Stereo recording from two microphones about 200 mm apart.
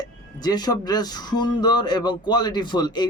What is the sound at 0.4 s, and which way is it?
A man's voice, 20° left (ahead or behind).